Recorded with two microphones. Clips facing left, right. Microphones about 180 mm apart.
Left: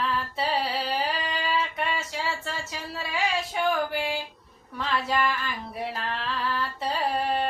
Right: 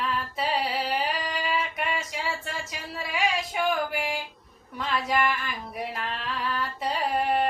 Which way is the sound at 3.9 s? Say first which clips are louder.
Left 1 dB; 15° right (ahead or behind).